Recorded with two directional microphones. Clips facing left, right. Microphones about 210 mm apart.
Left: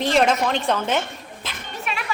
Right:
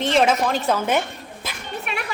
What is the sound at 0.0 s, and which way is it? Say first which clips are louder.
A woman's voice: even; centre (ahead or behind).